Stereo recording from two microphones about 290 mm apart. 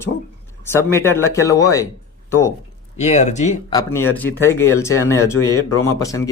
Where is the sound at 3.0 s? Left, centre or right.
Left.